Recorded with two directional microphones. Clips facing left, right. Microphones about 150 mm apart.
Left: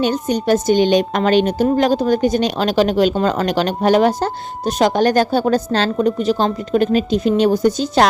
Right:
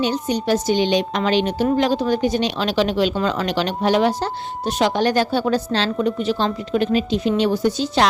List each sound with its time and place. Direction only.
0.0 s speech: 50° left (ahead or behind)